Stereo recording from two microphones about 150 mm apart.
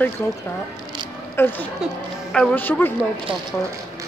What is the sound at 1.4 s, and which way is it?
Speech, 15° left (ahead or behind).